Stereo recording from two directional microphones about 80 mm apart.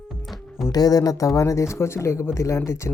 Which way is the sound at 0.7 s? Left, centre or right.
Left.